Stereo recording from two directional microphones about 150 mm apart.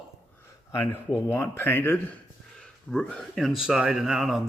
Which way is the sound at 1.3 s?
15° left (ahead or behind).